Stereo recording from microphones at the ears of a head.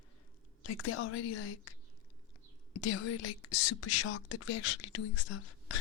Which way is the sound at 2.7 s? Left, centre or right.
Left.